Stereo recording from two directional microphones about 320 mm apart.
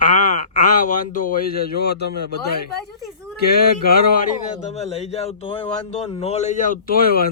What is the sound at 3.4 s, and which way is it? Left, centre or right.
A man's voice, left.